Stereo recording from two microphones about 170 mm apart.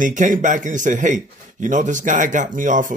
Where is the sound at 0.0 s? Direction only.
50° right (ahead or behind).